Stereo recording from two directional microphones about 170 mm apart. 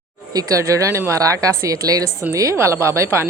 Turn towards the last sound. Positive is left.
turn(degrees=-15)  # may be behind; listen again after turning